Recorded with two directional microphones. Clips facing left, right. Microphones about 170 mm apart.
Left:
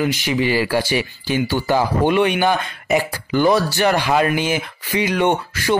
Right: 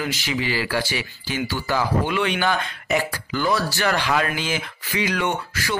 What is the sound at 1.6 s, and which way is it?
Speech, 20° left (ahead or behind).